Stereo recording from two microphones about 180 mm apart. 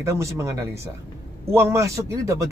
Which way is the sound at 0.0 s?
15° right (ahead or behind).